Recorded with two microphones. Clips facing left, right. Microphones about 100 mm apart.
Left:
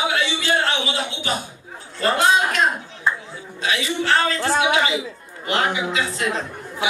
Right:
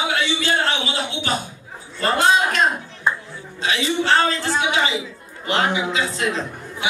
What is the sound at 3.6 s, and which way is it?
Speech, 25° right (ahead or behind).